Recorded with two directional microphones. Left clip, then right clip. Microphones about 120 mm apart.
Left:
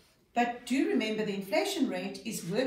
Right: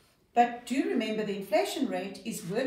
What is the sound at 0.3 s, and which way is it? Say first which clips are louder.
A woman's voice: right 4 dB; 20° right (ahead or behind).